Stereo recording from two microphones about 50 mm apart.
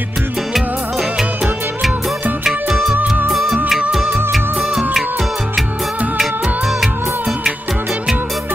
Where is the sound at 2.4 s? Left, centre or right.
Centre.